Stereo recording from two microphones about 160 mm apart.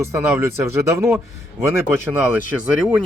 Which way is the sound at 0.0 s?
15° right (ahead or behind).